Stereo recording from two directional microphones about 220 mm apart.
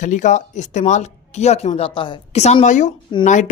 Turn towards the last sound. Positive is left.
turn(degrees=35)  # may be behind; listen again after turning